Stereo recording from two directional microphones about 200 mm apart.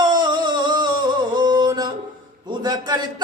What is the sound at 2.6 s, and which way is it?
Speech, 20° right (ahead or behind).